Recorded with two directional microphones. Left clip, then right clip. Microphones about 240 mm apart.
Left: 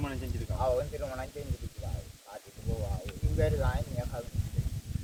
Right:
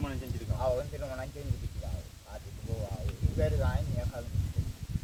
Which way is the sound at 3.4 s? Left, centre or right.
Centre.